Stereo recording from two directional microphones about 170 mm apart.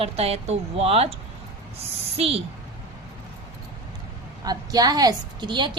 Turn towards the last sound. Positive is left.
turn(degrees=-25)  # may be behind; listen again after turning